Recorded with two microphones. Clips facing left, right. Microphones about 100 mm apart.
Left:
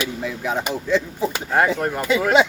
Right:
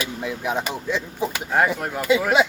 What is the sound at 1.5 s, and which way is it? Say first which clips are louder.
Speech: left 2 dB; 5° right (ahead or behind).